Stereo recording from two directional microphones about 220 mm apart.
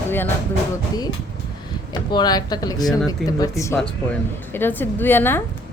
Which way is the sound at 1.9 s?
20° left (ahead or behind).